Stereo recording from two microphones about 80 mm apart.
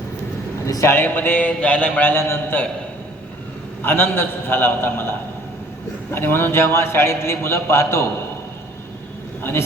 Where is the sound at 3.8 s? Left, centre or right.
Left.